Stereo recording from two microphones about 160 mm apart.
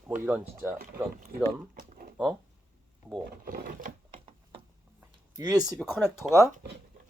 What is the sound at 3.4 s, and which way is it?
Speech, 65° right (ahead or behind).